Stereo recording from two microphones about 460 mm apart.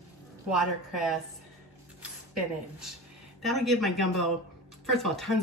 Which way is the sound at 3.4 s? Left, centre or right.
Centre.